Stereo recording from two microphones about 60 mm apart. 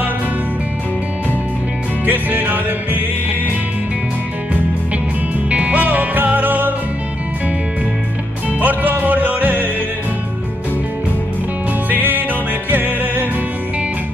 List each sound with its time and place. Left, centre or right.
2.0 s music: right
5.5 s music: right
8.5 s music: right
11.9 s music: right